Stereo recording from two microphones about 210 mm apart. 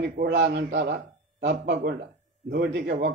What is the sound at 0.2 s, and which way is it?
A man's voice, 55° right (ahead or behind).